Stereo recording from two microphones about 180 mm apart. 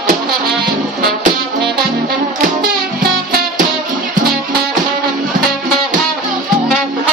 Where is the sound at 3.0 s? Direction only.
55° right (ahead or behind).